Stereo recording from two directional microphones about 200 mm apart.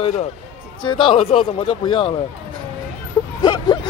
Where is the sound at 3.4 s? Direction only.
20° left (ahead or behind).